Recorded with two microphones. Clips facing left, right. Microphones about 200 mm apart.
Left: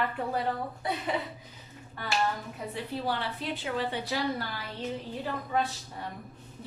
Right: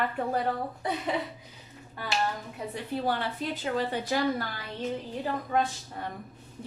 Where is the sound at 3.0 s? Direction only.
45° right (ahead or behind).